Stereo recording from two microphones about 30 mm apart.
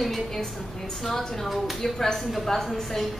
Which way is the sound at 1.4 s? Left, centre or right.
Centre.